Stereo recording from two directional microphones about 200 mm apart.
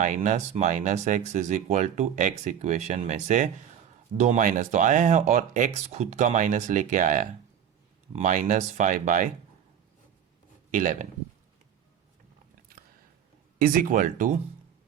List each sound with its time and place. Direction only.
0.0 s speech: 40° right (ahead or behind)
10.7 s speech: 40° right (ahead or behind)
13.6 s speech: 45° right (ahead or behind)